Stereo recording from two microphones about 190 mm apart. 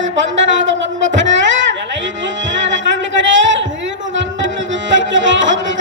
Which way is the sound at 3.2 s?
75° right (ahead or behind).